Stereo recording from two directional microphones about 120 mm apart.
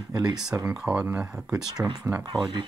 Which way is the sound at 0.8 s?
15° right (ahead or behind).